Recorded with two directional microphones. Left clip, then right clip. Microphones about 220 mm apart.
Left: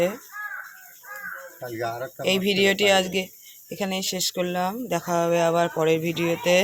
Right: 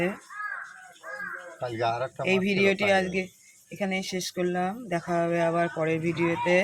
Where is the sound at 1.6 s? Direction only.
10° right (ahead or behind).